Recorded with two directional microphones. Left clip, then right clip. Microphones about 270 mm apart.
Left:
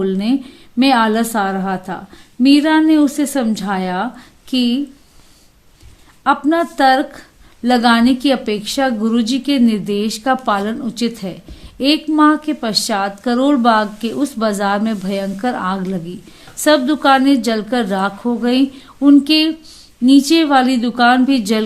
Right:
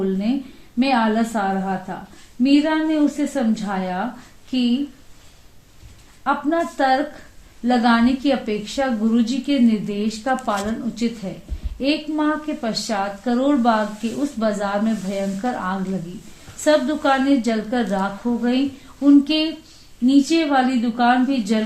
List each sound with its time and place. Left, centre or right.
0.0 s a sound: left
0.8 s a woman's voice: left
6.2 s a woman's voice: left